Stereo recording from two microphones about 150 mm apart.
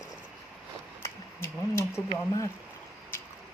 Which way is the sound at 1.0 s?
15° left (ahead or behind).